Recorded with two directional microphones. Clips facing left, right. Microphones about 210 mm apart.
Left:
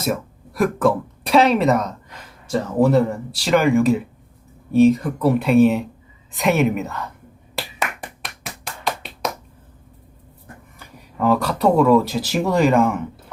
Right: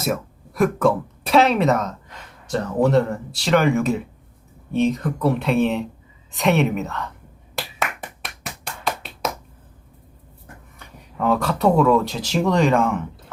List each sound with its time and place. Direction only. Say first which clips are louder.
0.0 s speech: left 1 dB; centre (ahead or behind)
7.5 s a sound: even; centre (ahead or behind)
10.8 s speech: left 3 dB; centre (ahead or behind)